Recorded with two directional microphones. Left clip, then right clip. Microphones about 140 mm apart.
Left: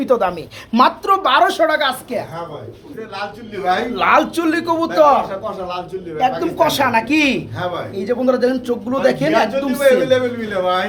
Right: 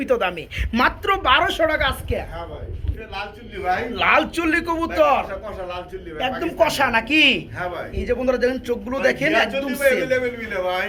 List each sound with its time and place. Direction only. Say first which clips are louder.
0.0 s a man's voice: left 4 dB; centre (ahead or behind)
1.2 s a woman's voice: left 3 dB; 15° right (ahead or behind)
3.9 s a man's voice: left 3 dB; 5° left (ahead or behind)
5.7 s a man's voice: left 6 dB; 20° right (ahead or behind); by 9.8 s 5° left (ahead or behind)
10.1 s a man's voice: left 5 dB; 45° left (ahead or behind)